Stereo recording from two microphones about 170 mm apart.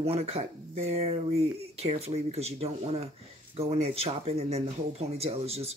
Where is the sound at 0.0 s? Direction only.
35° right (ahead or behind).